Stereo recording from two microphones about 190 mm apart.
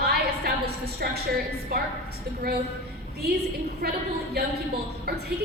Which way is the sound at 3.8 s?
55° right (ahead or behind).